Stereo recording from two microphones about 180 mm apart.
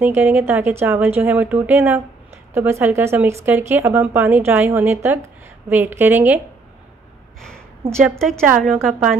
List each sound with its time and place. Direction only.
0.0 s speech: 10° right (ahead or behind)
7.9 s a woman's voice: centre (ahead or behind)